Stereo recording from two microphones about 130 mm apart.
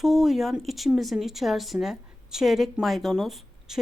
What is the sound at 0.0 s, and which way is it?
Speech, centre (ahead or behind).